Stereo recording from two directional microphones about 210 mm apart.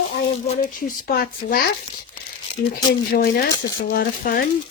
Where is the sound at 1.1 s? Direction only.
45° left (ahead or behind).